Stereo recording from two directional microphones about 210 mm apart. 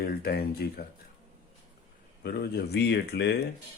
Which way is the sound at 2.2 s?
50° left (ahead or behind).